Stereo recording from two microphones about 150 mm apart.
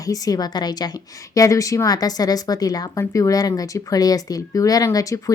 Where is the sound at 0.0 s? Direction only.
25° left (ahead or behind).